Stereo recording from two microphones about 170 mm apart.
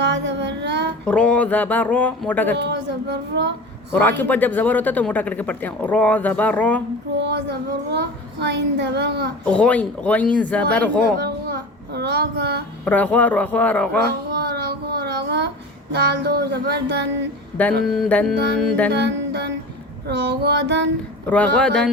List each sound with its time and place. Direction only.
0.0 s child singing: 90° right
1.0 s speech: 5° left (ahead or behind)
2.6 s speech: 85° right
4.2 s speech: 10° left (ahead or behind)
7.2 s speech: 80° right
9.4 s speech: 10° left (ahead or behind)
11.0 s a child's voice: 70° right (ahead or behind)
12.8 s speech: 10° left (ahead or behind)
14.1 s child singing: 75° right (ahead or behind)
17.8 s music: centre (ahead or behind)
18.9 s music: 85° right
20.1 s speech: 80° right
21.2 s speech: 10° left (ahead or behind)